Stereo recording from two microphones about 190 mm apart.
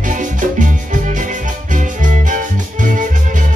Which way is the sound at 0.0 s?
45° right (ahead or behind).